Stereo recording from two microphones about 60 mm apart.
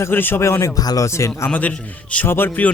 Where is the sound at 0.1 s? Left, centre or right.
Left.